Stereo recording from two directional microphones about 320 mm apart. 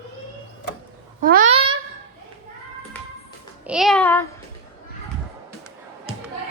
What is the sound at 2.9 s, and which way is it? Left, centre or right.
Music, centre.